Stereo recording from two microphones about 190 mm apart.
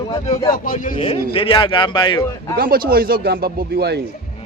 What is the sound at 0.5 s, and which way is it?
Speech, 45° left (ahead or behind).